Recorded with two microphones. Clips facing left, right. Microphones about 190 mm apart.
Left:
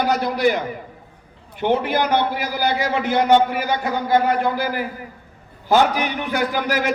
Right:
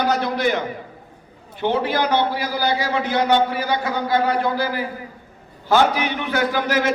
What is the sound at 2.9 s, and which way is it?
A man's voice, 50° left (ahead or behind).